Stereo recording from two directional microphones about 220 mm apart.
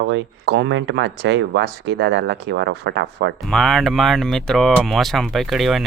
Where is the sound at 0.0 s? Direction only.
55° right (ahead or behind).